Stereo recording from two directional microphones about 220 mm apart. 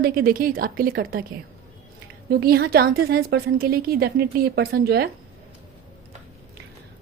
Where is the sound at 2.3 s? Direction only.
45° right (ahead or behind).